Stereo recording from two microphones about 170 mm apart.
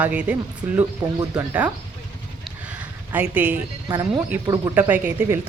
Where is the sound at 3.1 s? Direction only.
10° right (ahead or behind).